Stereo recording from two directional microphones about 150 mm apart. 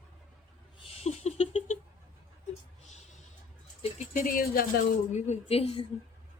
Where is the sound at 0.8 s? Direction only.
40° left (ahead or behind).